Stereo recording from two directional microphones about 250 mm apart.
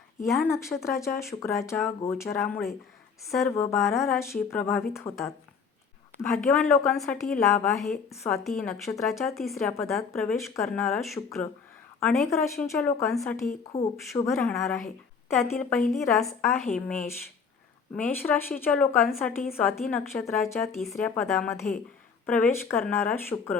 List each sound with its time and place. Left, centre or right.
0.3 s a woman's voice: centre
13.7 s speech: left
14.1 s a woman's voice: centre
17.9 s speech: centre